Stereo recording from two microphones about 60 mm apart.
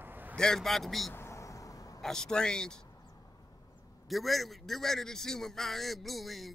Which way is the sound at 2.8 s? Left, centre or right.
Left.